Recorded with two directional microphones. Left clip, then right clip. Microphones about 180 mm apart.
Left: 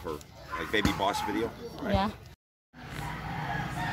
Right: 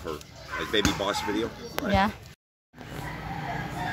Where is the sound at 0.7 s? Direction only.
30° left (ahead or behind).